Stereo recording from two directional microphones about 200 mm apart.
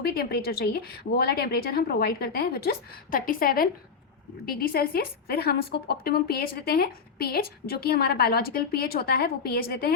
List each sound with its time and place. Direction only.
0.0 s a woman's voice: 50° left (ahead or behind)
4.7 s a woman's voice: 50° left (ahead or behind)